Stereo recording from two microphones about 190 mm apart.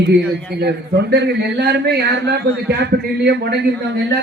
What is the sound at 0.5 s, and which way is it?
A man's voice, 55° right (ahead or behind).